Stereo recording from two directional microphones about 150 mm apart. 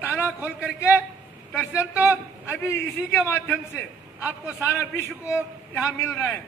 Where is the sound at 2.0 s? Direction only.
15° left (ahead or behind).